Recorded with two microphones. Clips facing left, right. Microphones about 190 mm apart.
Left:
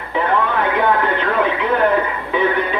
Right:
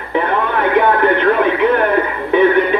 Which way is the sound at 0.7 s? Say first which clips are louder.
Right 8 dB; 60° right (ahead or behind).